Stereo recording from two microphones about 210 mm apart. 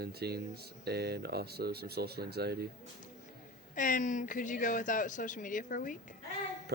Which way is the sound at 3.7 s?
40° left (ahead or behind).